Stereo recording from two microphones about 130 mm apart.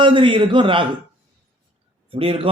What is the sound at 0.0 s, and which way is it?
Speech, 40° right (ahead or behind).